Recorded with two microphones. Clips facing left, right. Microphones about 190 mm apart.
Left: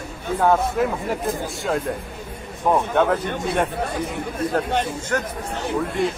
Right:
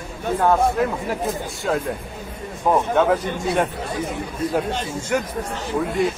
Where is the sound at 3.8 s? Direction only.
55° left (ahead or behind).